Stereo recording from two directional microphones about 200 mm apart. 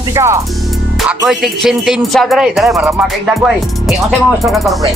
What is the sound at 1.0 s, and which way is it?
Speech, centre (ahead or behind).